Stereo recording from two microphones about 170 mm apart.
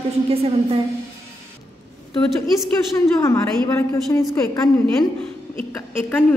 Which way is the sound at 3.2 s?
15° left (ahead or behind).